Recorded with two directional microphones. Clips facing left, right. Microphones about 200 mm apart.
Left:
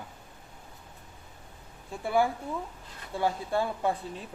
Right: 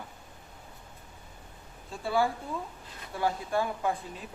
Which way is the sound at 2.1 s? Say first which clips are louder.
Left 2 dB; 20° left (ahead or behind).